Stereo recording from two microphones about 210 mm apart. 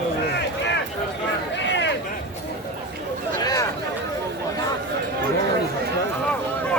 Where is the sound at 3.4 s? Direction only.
15° left (ahead or behind).